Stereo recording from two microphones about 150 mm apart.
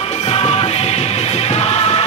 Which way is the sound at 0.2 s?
45° left (ahead or behind).